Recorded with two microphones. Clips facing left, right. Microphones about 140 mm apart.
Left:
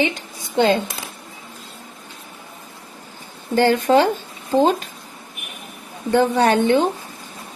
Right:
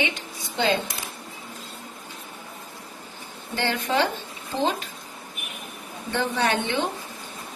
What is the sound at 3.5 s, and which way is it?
Speech, 45° left (ahead or behind).